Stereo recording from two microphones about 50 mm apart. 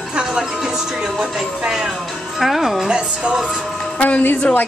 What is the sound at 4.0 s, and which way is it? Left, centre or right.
Speech, left.